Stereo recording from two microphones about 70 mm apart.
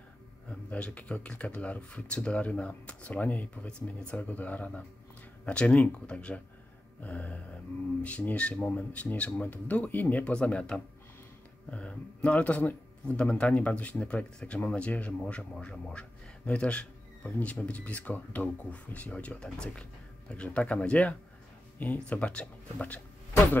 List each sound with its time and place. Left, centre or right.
0.5 s speech: centre